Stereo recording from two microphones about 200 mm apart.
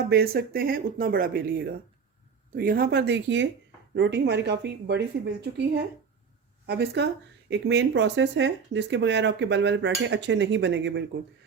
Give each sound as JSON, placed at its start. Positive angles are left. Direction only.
{"t": 0.1, "sound": "speech", "side_deg": -50}